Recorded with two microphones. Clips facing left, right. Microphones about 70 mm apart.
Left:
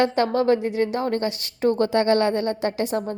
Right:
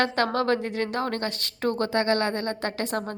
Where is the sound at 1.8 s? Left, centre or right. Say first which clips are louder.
Left 4 dB; right.